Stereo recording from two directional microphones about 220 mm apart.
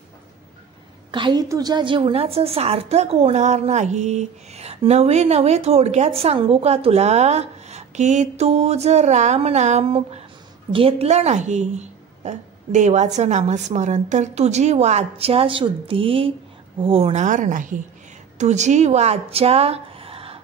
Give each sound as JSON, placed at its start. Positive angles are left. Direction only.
{"t": 1.1, "sound": "a woman's voice", "side_deg": -20}